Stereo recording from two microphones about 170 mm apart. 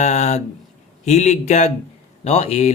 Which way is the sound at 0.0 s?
40° left (ahead or behind).